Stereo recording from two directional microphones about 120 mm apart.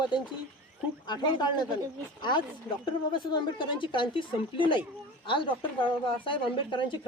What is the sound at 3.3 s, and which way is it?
Speech, 40° left (ahead or behind).